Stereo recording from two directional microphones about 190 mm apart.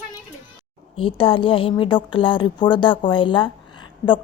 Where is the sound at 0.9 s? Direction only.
30° left (ahead or behind).